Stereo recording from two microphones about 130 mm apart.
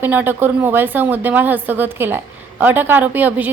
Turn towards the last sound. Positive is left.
turn(degrees=-15)  # may be behind; listen again after turning